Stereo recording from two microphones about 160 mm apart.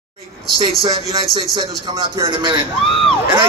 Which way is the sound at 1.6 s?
30° right (ahead or behind).